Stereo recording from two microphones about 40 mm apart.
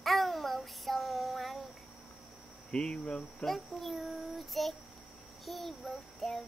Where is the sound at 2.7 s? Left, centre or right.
Left.